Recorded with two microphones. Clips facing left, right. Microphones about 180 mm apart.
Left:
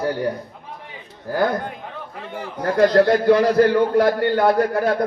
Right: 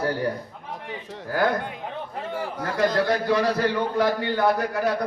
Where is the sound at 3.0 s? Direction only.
55° left (ahead or behind).